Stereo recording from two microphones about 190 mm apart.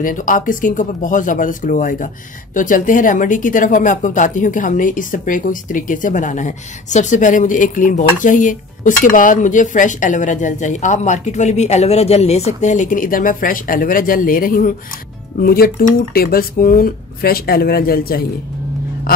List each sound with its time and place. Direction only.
0.0 s speech: 45° left (ahead or behind)